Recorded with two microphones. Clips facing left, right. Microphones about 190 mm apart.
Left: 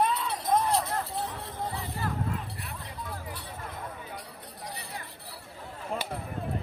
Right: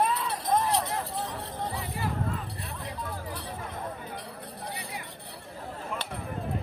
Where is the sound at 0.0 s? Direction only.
Centre (ahead or behind).